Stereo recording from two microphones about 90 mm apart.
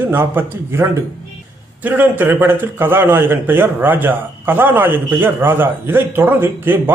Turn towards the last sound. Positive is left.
turn(degrees=-25)  # may be behind; listen again after turning